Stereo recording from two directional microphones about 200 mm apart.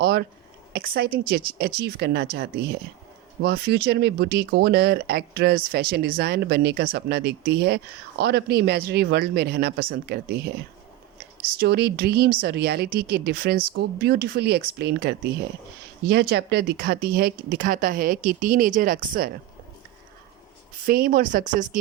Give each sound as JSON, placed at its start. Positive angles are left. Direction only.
{"t": 0.0, "sound": "speech", "side_deg": -55}
{"t": 11.5, "sound": "speech", "side_deg": -55}
{"t": 20.8, "sound": "speech", "side_deg": -45}